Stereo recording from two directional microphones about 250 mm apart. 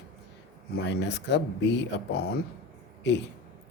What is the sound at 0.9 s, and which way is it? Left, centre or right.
Speech, left.